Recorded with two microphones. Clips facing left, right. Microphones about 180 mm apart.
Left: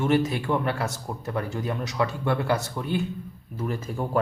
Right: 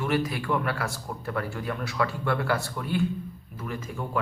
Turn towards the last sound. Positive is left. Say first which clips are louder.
# left 5 dB
turn(degrees=35)  # may be behind; listen again after turning